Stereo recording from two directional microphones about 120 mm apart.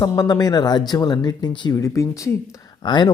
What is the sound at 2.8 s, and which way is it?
Speech, 40° left (ahead or behind).